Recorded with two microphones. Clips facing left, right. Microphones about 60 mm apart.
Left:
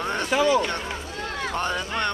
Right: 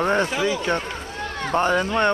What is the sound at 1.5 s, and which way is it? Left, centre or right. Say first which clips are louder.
Speech: right 9 dB; right.